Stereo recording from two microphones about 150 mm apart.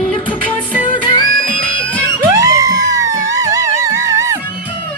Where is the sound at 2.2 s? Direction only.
25° right (ahead or behind).